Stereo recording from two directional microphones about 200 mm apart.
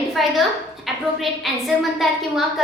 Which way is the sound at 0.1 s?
Centre (ahead or behind).